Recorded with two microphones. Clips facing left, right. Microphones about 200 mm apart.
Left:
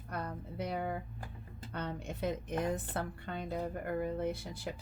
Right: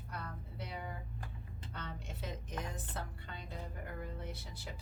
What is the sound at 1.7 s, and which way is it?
Speech, 60° left (ahead or behind).